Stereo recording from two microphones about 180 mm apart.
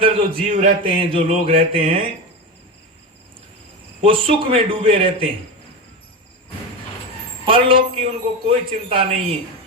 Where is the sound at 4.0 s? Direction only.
30° right (ahead or behind).